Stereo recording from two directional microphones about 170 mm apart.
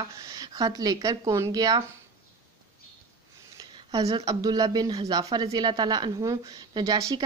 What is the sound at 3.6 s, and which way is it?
Speech, 25° right (ahead or behind).